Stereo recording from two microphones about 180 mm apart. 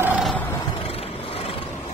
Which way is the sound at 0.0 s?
5° right (ahead or behind).